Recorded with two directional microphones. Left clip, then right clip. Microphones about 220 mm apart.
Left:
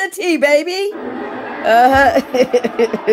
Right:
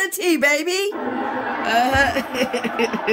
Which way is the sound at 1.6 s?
15° left (ahead or behind).